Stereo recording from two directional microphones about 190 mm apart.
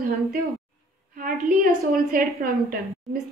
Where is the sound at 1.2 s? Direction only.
50° right (ahead or behind).